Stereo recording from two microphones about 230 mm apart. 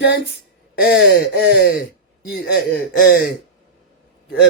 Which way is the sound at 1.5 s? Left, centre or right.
Left.